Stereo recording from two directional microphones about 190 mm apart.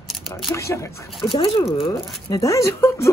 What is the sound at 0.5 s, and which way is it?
Speech, 15° left (ahead or behind).